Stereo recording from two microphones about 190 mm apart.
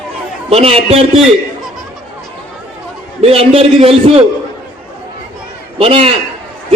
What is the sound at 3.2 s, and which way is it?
A man's voice, 30° right (ahead or behind).